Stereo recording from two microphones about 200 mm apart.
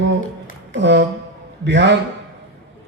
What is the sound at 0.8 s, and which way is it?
A man's voice, 60° right (ahead or behind).